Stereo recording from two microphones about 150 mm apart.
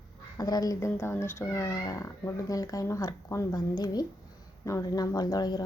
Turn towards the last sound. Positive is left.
turn(degrees=25)  # may be behind; listen again after turning